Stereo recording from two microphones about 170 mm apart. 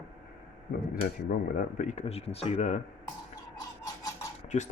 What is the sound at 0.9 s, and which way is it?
Speech, 50° left (ahead or behind).